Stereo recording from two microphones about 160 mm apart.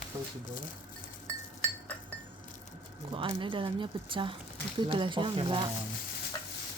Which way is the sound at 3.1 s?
30° right (ahead or behind).